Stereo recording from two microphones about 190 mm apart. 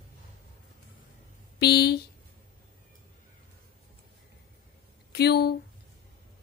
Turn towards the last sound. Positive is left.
turn(degrees=60)  # may be behind; listen again after turning